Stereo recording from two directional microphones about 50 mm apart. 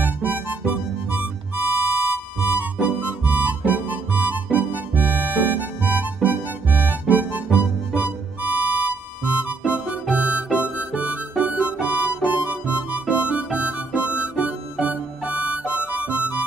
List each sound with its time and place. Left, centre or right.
0.0 s music: right
9.7 s harmonica: right
12.2 s music: right